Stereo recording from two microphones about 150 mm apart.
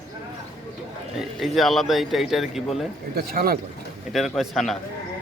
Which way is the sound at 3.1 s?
85° right.